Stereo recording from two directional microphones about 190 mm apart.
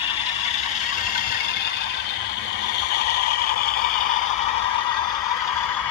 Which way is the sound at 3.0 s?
55° left (ahead or behind).